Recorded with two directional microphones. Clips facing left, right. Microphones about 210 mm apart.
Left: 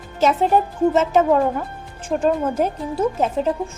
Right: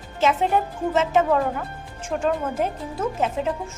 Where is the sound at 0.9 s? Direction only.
40° left (ahead or behind).